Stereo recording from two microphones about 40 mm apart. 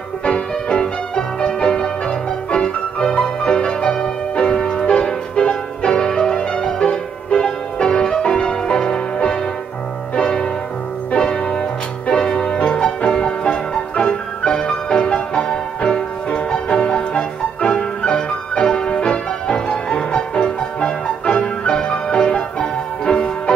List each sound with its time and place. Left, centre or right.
0.2 s music: left